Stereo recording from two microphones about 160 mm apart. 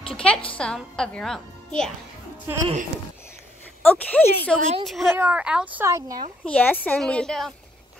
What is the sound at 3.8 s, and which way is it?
A woman's voice, 10° left (ahead or behind).